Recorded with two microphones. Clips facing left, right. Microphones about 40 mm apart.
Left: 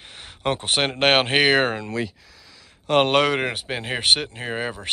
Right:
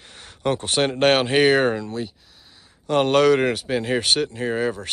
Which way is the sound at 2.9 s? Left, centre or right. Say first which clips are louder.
Right 2 dB; left.